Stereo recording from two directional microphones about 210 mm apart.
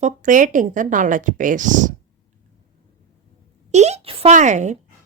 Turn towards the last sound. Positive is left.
turn(degrees=-35)  # may be behind; listen again after turning